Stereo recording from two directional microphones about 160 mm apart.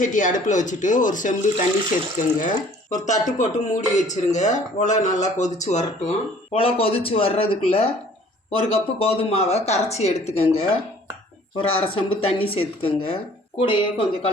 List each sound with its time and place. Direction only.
0.0 s speech: 55° left (ahead or behind)
6.5 s speech: 35° left (ahead or behind)